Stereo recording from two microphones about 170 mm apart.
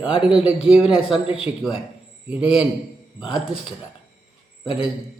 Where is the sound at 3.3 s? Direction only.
5° right (ahead or behind).